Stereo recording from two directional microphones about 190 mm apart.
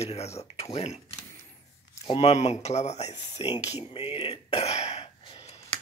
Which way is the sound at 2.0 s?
35° left (ahead or behind).